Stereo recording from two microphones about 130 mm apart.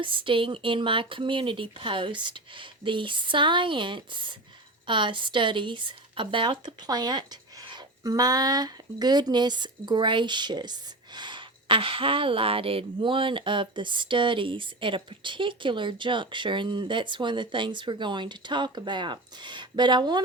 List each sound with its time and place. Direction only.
0.0 s speech: 40° right (ahead or behind)